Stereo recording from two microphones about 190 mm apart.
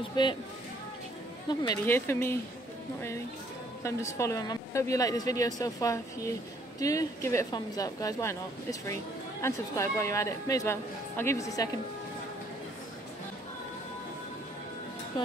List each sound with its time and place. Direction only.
0.1 s speech: 25° left (ahead or behind)
1.5 s speech: 20° left (ahead or behind)
4.2 s speech: 20° left (ahead or behind)